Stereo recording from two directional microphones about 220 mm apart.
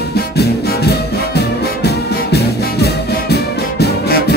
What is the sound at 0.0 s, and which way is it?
Music, 45° left (ahead or behind).